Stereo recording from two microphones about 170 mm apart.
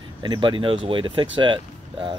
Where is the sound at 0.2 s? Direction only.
25° right (ahead or behind).